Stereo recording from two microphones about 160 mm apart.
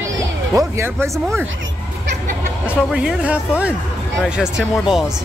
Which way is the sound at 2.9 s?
5° right (ahead or behind).